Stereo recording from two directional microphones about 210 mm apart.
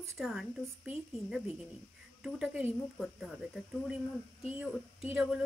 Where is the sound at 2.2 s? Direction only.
Centre (ahead or behind).